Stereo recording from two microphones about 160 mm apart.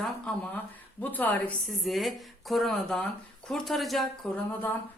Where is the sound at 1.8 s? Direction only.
Centre (ahead or behind).